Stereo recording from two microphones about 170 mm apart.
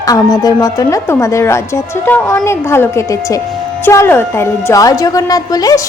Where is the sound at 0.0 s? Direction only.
20° left (ahead or behind).